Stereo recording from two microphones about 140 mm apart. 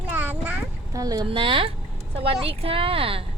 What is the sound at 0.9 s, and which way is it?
Speech, 25° right (ahead or behind).